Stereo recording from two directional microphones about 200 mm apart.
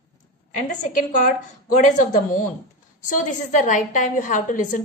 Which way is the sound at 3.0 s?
40° left (ahead or behind).